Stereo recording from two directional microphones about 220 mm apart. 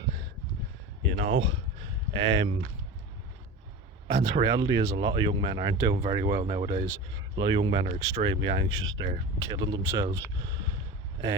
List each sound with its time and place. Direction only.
1.0 s speech: 60° right (ahead or behind)
1.3 s speech: 25° right (ahead or behind)
4.1 s speech: 20° right (ahead or behind)